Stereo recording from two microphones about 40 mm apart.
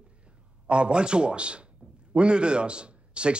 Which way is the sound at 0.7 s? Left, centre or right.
Right.